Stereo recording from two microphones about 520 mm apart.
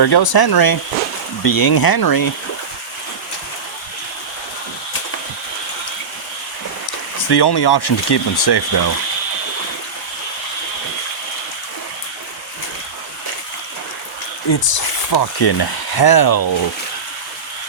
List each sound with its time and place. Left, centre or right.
0.0 s speech: left
7.2 s speech: left
14.5 s speech: left